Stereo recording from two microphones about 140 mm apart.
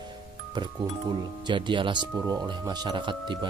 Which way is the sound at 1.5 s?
35° right (ahead or behind).